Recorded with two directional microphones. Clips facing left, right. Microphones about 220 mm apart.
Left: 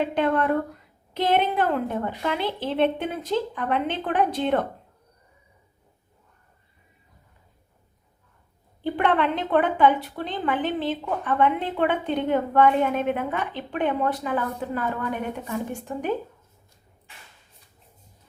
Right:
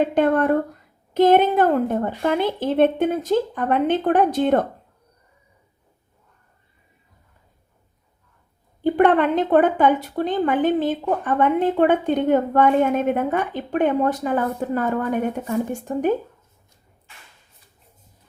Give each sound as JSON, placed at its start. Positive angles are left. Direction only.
{"t": 0.0, "sound": "a sound", "side_deg": -45}
{"t": 1.1, "sound": "a woman's voice", "side_deg": -45}
{"t": 8.8, "sound": "a woman's voice", "side_deg": -45}